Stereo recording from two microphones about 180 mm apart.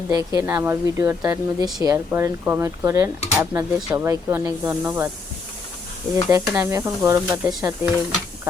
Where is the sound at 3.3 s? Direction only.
5° right (ahead or behind).